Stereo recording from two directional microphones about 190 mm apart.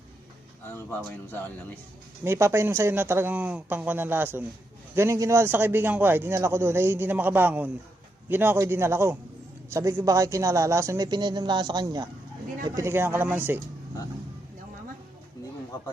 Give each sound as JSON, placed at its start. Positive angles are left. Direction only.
{"t": 0.7, "sound": "speech", "side_deg": 10}
{"t": 2.2, "sound": "a man's voice", "side_deg": -10}